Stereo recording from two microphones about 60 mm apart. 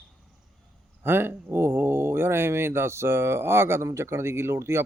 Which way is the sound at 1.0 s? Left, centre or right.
Right.